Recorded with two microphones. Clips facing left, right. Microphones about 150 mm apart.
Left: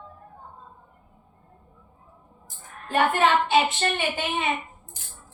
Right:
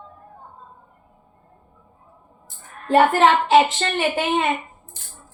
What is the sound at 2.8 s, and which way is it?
A woman's voice, 85° right.